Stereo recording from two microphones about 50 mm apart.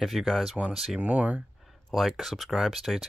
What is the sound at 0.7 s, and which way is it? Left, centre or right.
Speech, centre.